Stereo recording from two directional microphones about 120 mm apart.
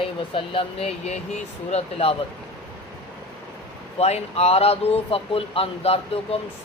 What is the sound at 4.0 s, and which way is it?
Speech, 60° left (ahead or behind).